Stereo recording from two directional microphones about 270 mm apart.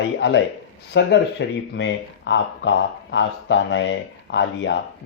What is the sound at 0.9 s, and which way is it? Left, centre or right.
Speech, left.